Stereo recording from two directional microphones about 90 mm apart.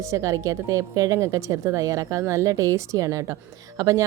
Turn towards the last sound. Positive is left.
turn(degrees=-40)  # may be behind; listen again after turning